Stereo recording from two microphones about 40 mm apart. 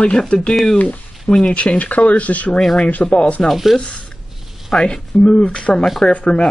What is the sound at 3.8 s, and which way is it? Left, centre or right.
Speech, left.